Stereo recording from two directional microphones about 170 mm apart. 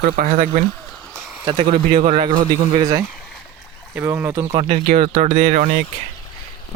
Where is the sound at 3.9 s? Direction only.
15° right (ahead or behind).